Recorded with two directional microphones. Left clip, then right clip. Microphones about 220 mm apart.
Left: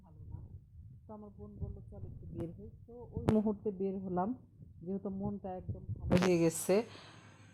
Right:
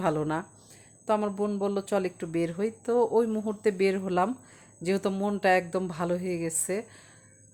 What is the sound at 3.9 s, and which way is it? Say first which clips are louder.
Speech: right 10 dB; 30° right (ahead or behind).